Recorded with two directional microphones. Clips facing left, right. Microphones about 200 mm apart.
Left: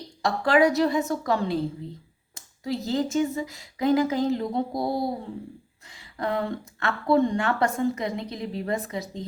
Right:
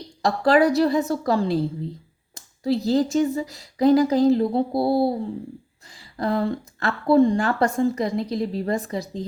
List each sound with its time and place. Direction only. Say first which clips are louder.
0.2 s speech: right 3 dB; 35° right (ahead or behind)